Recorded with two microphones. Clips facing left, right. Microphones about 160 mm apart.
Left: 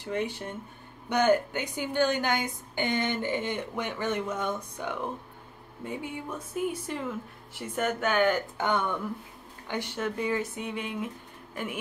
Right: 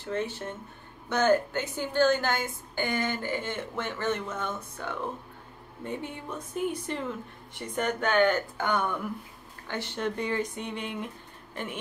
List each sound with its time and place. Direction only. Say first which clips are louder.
0.0 s a woman's voice: even; 15° left (ahead or behind)
8.5 s speech: left 1 dB; 20° left (ahead or behind)
9.7 s speech: even; 10° left (ahead or behind)